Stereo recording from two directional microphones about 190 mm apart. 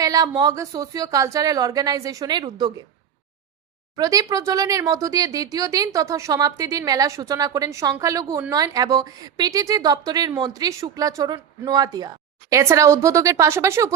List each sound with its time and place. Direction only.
0.0 s a woman's voice: 20° right (ahead or behind)
3.9 s a woman's voice: 20° right (ahead or behind)